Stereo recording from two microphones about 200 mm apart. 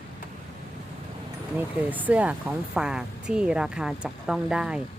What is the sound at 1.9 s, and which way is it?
Speech, 5° right (ahead or behind).